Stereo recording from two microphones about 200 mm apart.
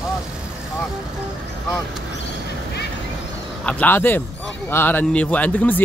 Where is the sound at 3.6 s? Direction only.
10° left (ahead or behind).